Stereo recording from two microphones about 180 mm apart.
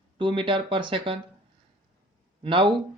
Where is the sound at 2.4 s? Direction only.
30° right (ahead or behind).